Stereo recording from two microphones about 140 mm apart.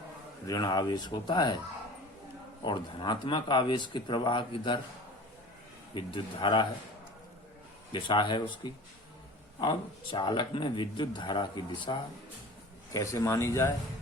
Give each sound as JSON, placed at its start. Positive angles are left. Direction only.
{"t": 0.4, "sound": "speech", "side_deg": 30}
{"t": 2.6, "sound": "speech", "side_deg": 35}
{"t": 5.9, "sound": "speech", "side_deg": 35}
{"t": 7.9, "sound": "speech", "side_deg": 35}